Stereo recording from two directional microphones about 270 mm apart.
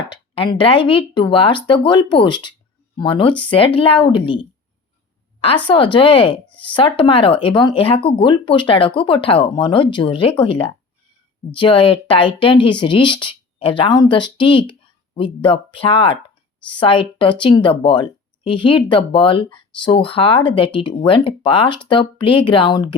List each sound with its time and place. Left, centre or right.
0.1 s speech: centre
5.6 s speech: centre